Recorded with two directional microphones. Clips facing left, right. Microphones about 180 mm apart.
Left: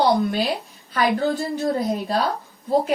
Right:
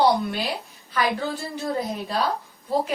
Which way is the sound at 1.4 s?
35° left (ahead or behind).